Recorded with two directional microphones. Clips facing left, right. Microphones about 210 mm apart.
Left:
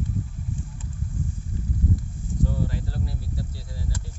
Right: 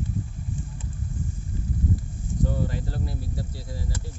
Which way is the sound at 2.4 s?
45° right (ahead or behind).